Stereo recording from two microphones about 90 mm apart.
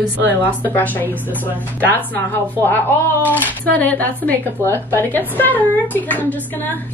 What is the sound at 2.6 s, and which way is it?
A woman's voice, 25° left (ahead or behind).